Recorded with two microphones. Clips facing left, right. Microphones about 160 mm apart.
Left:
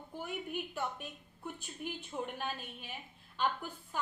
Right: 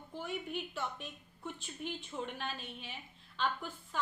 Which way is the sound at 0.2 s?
10° left (ahead or behind).